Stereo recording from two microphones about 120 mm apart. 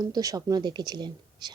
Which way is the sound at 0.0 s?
30° right (ahead or behind).